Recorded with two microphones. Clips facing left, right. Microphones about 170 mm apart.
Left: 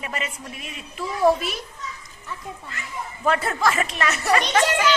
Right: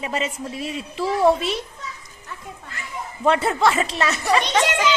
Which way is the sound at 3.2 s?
25° right (ahead or behind).